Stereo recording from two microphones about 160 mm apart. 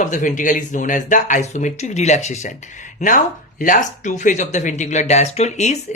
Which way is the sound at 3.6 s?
55° left (ahead or behind).